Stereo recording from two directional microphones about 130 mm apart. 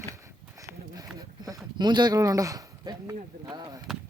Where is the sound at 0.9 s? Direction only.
30° right (ahead or behind).